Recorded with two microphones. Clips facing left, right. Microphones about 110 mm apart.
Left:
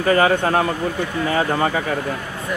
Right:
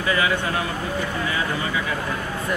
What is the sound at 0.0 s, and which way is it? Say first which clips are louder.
Speech: left 6 dB; 45° left (ahead or behind).